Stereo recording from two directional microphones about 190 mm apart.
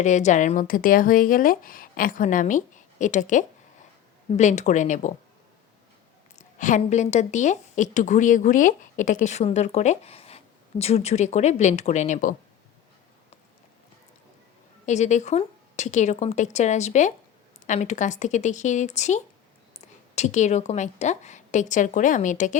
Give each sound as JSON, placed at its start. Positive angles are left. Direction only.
{"t": 0.0, "sound": "a woman's voice", "side_deg": 40}
{"t": 6.6, "sound": "a woman's voice", "side_deg": 40}
{"t": 14.8, "sound": "a woman's voice", "side_deg": 40}